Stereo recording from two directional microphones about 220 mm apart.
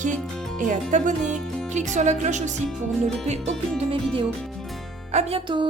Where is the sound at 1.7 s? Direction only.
35° right (ahead or behind).